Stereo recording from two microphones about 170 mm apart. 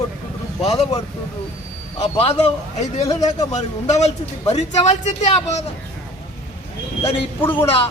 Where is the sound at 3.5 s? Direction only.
40° left (ahead or behind).